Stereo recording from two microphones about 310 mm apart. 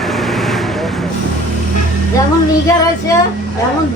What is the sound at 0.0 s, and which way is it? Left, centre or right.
Vehicle, centre.